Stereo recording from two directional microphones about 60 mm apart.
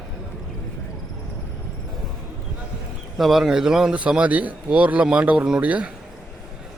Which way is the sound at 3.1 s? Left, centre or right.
Centre.